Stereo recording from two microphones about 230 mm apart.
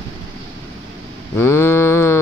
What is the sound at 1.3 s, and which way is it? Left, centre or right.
Mantra, centre.